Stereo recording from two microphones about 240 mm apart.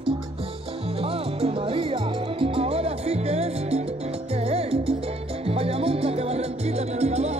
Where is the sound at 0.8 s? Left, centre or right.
Right.